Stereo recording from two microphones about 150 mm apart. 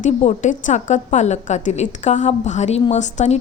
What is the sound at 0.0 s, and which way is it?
A woman's voice, 55° left (ahead or behind).